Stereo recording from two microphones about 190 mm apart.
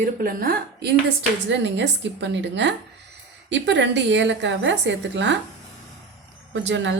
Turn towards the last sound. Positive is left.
turn(degrees=-70)  # may be behind; listen again after turning